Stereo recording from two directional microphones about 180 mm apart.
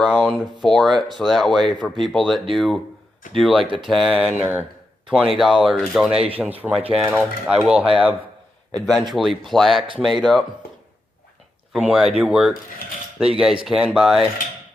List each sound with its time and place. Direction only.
0.0 s speech: 10° left (ahead or behind)
0.9 s speech: 25° right (ahead or behind)
1.1 s speech: centre (ahead or behind)
3.6 s speech: 30° right (ahead or behind)
3.8 s speech: centre (ahead or behind)
8.9 s speech: centre (ahead or behind)
11.7 s speech: 5° right (ahead or behind)